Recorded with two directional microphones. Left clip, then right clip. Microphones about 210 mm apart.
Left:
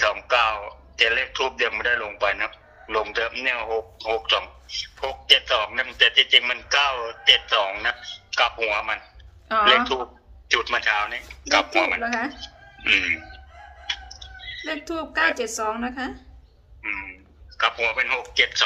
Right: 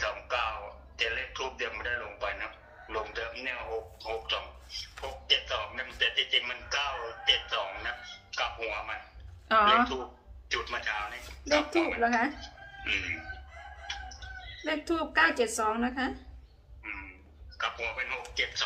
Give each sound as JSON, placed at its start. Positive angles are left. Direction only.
{"t": 0.0, "sound": "a sound", "side_deg": 55}
{"t": 9.5, "sound": "speech", "side_deg": 5}
{"t": 10.5, "sound": "a man's voice", "side_deg": 55}
{"t": 11.9, "sound": "speech", "side_deg": 10}
{"t": 12.4, "sound": "music", "side_deg": 55}
{"t": 14.6, "sound": "speech", "side_deg": 10}
{"t": 16.8, "sound": "frog", "side_deg": 55}
{"t": 17.6, "sound": "a man's voice", "side_deg": 55}